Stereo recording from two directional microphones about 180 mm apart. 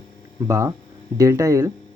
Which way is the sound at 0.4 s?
15° right (ahead or behind).